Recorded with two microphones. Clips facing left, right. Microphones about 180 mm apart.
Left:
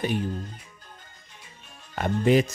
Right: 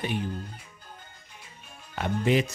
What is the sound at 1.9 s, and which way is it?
Speech, 45° left (ahead or behind).